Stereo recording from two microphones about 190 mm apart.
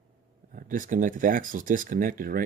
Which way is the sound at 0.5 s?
45° right (ahead or behind).